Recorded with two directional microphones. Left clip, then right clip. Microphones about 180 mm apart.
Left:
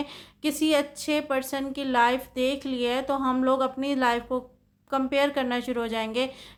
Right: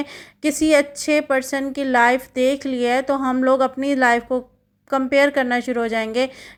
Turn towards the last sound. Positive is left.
turn(degrees=-30)  # may be behind; listen again after turning